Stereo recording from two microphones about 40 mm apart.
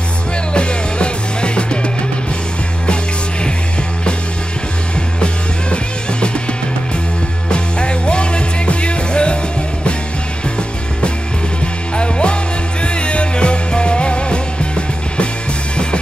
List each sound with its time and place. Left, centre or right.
0.5 s music: left
7.4 s music: left
12.0 s music: left